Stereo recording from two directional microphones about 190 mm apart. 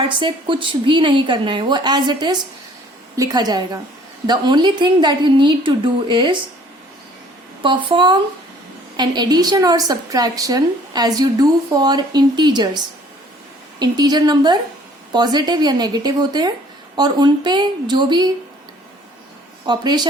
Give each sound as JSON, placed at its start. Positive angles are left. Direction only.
{"t": 0.0, "sound": "a woman's voice", "side_deg": -25}
{"t": 7.6, "sound": "a woman's voice", "side_deg": -25}
{"t": 13.7, "sound": "a woman's voice", "side_deg": -20}
{"t": 19.6, "sound": "a woman's voice", "side_deg": -20}